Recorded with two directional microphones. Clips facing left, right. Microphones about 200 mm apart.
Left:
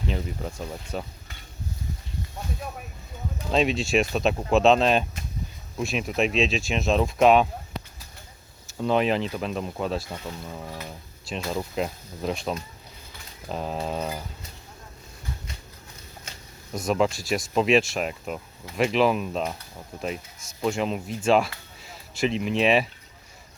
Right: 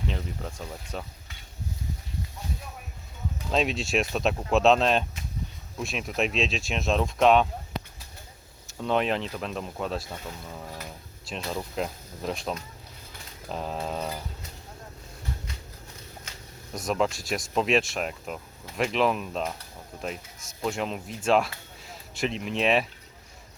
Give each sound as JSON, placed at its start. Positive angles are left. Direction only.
{"t": 0.4, "sound": "speech", "side_deg": 10}
{"t": 3.5, "sound": "speech", "side_deg": 0}
{"t": 8.8, "sound": "speech", "side_deg": 0}
{"t": 16.7, "sound": "speech", "side_deg": 0}